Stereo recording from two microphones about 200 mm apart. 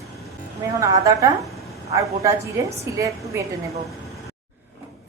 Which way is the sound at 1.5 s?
Centre (ahead or behind).